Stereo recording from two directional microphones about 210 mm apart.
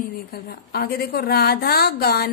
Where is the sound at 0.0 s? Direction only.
45° left (ahead or behind).